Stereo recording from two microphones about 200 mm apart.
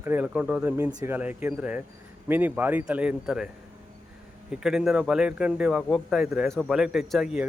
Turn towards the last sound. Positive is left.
turn(degrees=0)  # may be behind; listen again after turning